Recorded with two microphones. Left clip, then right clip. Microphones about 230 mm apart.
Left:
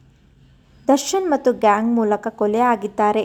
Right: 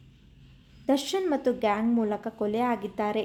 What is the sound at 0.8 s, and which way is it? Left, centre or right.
A woman's voice, centre.